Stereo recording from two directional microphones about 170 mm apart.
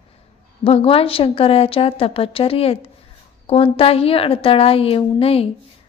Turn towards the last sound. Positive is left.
turn(degrees=35)  # may be behind; listen again after turning